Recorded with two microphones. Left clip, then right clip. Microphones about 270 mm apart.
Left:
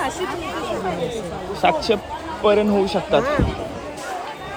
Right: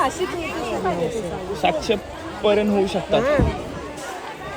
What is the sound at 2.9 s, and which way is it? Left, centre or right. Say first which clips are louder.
Speech: even; centre.